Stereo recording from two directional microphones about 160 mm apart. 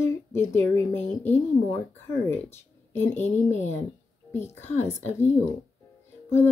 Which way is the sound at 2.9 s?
15° left (ahead or behind).